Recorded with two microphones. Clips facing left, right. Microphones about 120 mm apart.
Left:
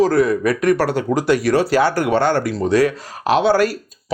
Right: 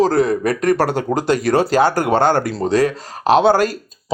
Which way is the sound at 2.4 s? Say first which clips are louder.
Even; 30° right (ahead or behind).